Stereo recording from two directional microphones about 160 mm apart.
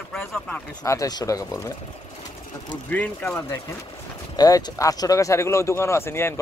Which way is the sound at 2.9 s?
10° left (ahead or behind).